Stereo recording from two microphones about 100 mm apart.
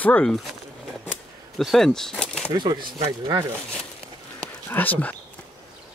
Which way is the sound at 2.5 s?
45° right (ahead or behind).